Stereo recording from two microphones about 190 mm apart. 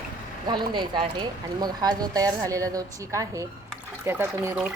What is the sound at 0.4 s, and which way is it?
Speech, 25° right (ahead or behind).